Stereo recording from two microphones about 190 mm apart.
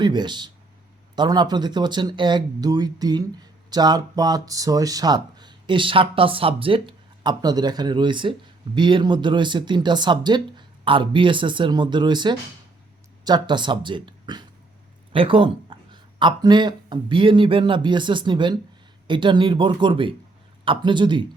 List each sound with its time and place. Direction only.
0.0 s speech: 25° right (ahead or behind)